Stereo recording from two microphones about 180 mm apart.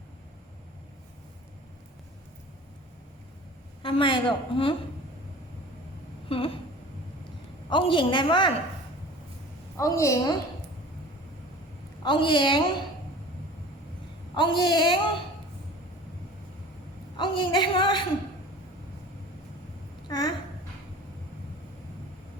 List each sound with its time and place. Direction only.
3.8 s a man's voice: 30° left (ahead or behind)
6.2 s a sound: 30° left (ahead or behind)
7.7 s a man's voice: 25° left (ahead or behind)
9.7 s a woman's voice: 15° left (ahead or behind)
12.0 s a man's voice: 25° left (ahead or behind)
14.3 s a man's voice: 25° left (ahead or behind)
17.2 s a man's voice: 25° left (ahead or behind)
20.1 s a sound: 20° left (ahead or behind)